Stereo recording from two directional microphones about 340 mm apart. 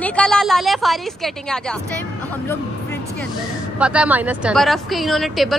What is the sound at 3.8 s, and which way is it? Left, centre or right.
A woman's voice, centre.